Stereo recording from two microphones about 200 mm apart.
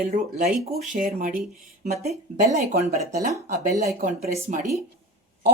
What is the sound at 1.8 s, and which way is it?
A woman's voice, 35° right (ahead or behind).